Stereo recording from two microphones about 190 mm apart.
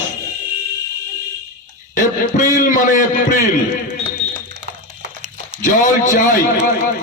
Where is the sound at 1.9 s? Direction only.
45° left (ahead or behind).